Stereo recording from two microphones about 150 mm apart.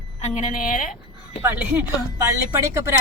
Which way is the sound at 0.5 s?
65° left (ahead or behind).